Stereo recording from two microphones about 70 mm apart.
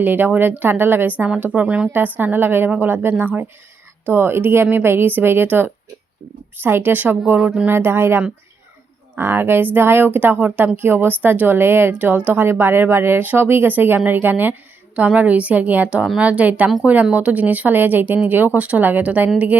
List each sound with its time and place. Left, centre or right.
0.0 s a woman's voice: right
7.3 s speech: centre
7.7 s a woman's voice: right